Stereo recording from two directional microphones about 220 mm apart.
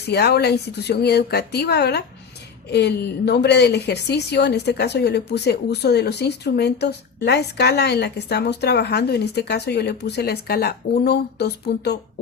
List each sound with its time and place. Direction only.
0.1 s a woman's voice: 50° left (ahead or behind)